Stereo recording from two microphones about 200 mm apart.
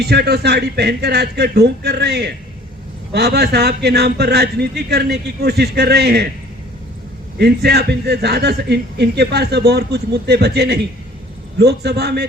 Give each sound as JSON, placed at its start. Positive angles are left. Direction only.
{"t": 0.0, "sound": "a man's voice", "side_deg": -55}
{"t": 7.3, "sound": "a man's voice", "side_deg": -50}